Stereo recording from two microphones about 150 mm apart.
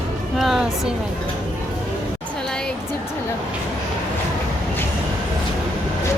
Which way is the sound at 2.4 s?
5° left (ahead or behind).